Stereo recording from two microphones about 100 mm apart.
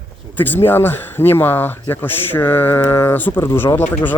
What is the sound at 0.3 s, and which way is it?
Speech, 20° left (ahead or behind).